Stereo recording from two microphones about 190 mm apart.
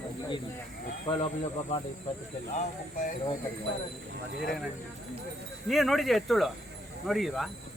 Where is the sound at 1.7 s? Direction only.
40° left (ahead or behind).